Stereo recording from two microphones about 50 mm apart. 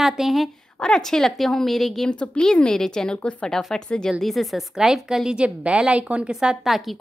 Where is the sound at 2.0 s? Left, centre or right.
Centre.